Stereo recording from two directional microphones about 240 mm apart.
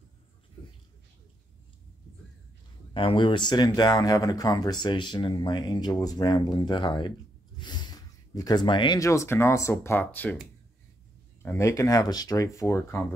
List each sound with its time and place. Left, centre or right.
2.9 s speech: left